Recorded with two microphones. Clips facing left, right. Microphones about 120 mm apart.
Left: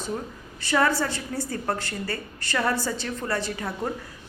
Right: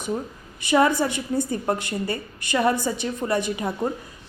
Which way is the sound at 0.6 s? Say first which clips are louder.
Right 4 dB; 15° right (ahead or behind).